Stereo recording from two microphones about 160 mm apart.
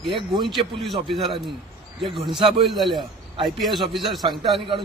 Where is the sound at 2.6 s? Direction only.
Centre (ahead or behind).